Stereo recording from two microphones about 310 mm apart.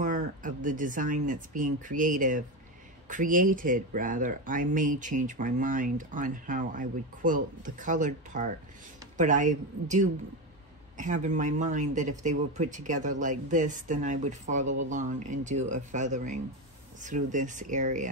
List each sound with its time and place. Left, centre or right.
0.0 s speech: right